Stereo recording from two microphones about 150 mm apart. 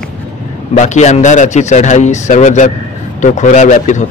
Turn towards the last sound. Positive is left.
turn(degrees=55)  # may be behind; listen again after turning